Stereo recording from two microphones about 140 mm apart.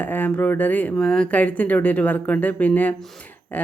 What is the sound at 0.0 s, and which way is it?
Speech, 15° left (ahead or behind).